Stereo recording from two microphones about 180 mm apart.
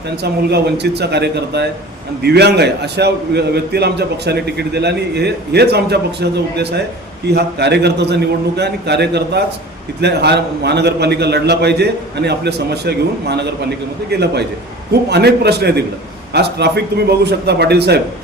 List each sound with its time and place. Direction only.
0.2 s a man's voice: 65° right (ahead or behind)